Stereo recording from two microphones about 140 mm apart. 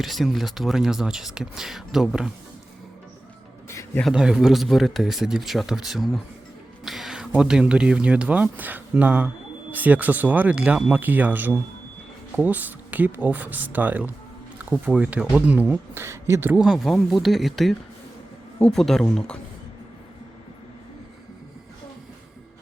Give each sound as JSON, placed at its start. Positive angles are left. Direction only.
{"t": 0.0, "sound": "speech", "side_deg": 0}
{"t": 3.7, "sound": "a sound", "side_deg": 20}
{"t": 4.0, "sound": "speech", "side_deg": -5}
{"t": 16.6, "sound": "speech", "side_deg": 0}